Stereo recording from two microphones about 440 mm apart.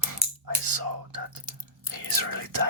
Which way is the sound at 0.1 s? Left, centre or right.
Right.